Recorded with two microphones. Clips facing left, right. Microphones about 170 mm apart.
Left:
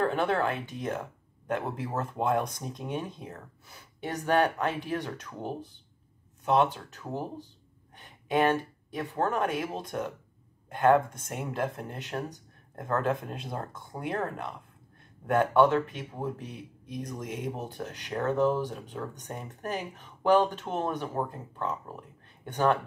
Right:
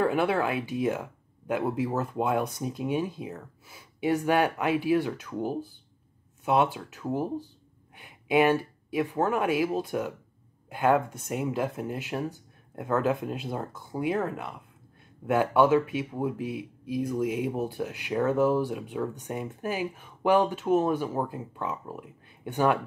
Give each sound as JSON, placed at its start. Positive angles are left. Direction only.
{"t": 0.0, "sound": "speech", "side_deg": -10}